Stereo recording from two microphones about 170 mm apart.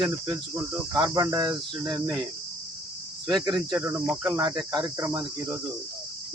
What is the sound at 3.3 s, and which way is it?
Cricket, 25° right (ahead or behind).